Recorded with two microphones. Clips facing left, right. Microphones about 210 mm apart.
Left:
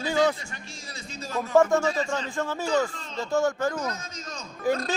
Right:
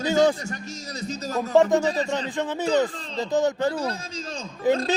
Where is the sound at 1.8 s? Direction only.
35° right (ahead or behind).